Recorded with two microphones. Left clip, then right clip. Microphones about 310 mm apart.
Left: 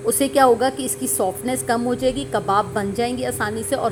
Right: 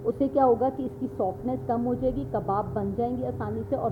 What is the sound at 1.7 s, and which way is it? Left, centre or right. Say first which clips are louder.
Speech: left 6 dB; left.